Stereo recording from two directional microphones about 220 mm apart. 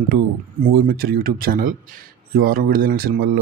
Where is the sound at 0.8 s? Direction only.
45° right (ahead or behind).